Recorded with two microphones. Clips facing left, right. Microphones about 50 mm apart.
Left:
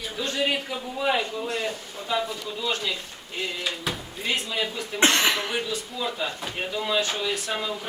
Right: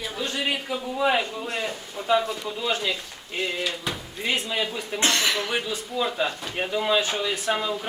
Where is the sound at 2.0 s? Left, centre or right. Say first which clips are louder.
Right 7 dB; right.